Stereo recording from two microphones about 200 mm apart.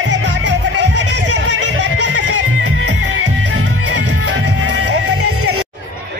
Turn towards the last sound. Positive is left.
turn(degrees=-90)